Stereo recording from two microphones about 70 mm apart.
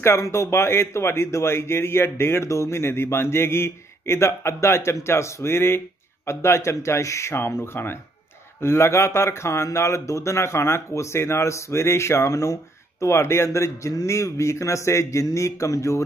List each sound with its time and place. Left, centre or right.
0.0 s a man's voice: left